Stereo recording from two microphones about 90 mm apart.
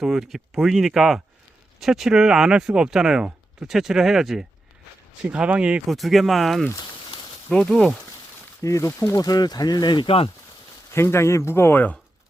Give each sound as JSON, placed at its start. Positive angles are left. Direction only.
{"t": 0.0, "sound": "speech", "side_deg": -5}
{"t": 5.9, "sound": "speech", "side_deg": 0}
{"t": 8.6, "sound": "speech", "side_deg": 35}
{"t": 10.9, "sound": "speech", "side_deg": 30}